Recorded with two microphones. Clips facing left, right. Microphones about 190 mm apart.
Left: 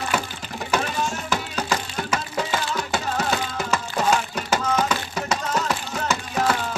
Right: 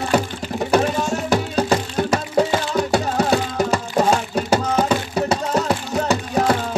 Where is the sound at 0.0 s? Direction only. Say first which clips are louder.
Right 7 dB; 35° right (ahead or behind).